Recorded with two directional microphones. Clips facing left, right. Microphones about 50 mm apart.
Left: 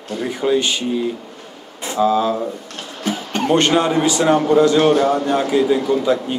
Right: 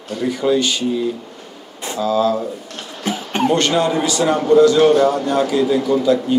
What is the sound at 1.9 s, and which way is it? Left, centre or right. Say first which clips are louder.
Speech: left 1 dB; left.